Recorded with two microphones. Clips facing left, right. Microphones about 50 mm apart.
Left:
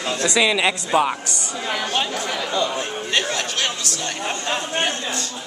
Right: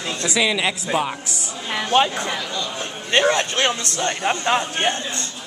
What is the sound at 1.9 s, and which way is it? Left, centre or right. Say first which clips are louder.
A man's voice: right 5 dB; right.